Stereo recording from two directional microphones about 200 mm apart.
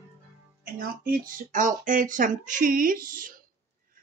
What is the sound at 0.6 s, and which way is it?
Speech, 45° right (ahead or behind).